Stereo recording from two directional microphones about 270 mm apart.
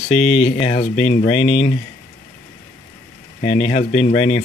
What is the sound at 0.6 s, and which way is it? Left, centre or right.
Speech, left.